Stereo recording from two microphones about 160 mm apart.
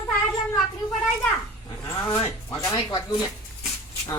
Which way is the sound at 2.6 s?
30° left (ahead or behind).